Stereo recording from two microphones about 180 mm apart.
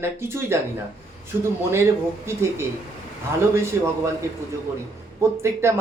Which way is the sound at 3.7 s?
15° right (ahead or behind).